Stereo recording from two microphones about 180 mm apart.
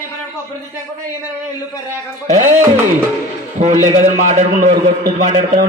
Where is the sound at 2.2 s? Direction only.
40° right (ahead or behind).